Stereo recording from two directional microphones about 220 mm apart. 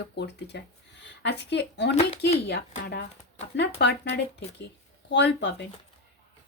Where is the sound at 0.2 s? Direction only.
50° left (ahead or behind).